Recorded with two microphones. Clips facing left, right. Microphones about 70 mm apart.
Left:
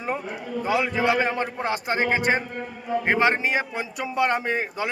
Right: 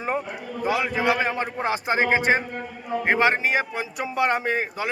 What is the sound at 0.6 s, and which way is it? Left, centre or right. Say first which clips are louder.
A man's voice: even; centre.